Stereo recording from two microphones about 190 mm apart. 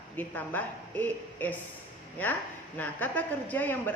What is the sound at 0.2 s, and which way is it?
A woman's voice, 10° left (ahead or behind).